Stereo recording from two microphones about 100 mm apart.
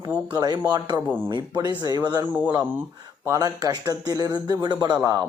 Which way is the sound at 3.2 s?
35° right (ahead or behind).